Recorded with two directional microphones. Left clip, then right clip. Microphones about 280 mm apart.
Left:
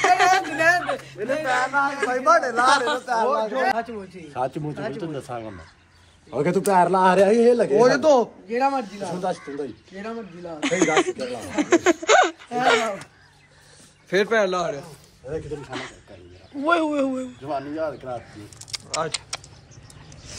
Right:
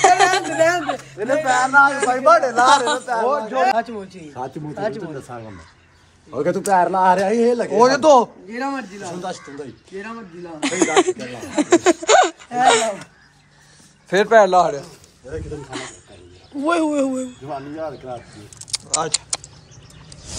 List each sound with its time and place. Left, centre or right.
0.0 s a sound: centre
2.0 s speech: centre
3.7 s speech: right
6.3 s a man's voice: left
7.7 s a man's voice: right
8.5 s speech: centre
9.2 s speech: left
10.0 s speech: centre
14.0 s a man's voice: right
15.6 s speech: centre
17.5 s speech: centre
18.7 s keys jangling: centre